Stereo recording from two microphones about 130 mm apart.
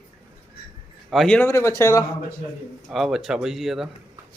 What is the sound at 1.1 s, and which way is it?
Speech, centre (ahead or behind).